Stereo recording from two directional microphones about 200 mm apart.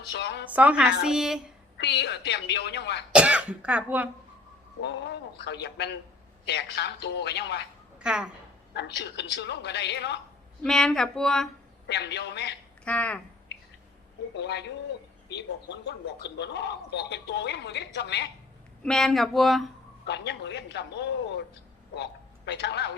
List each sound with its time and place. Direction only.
0.0 s a man's voice: 60° left (ahead or behind)
0.5 s a woman's voice: 5° right (ahead or behind)
1.8 s a man's voice: 55° left (ahead or behind)
3.1 s speech: 5° right (ahead or behind)
4.8 s a man's voice: 60° left (ahead or behind)
7.9 s speech: 5° right (ahead or behind)
8.7 s a man's voice: 60° left (ahead or behind)
10.6 s speech: 5° left (ahead or behind)
11.9 s a man's voice: 55° left (ahead or behind)
12.8 s speech: 5° left (ahead or behind)
14.3 s a man's voice: 60° left (ahead or behind)
18.8 s speech: 5° left (ahead or behind)
20.1 s a man's voice: 60° left (ahead or behind)